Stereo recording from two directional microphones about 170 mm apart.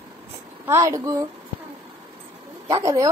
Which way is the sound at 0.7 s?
20° right (ahead or behind).